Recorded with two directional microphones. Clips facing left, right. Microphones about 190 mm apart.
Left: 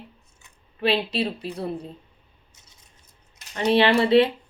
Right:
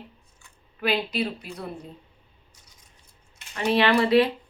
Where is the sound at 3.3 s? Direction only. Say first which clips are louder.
Left 2 dB; 40° left (ahead or behind).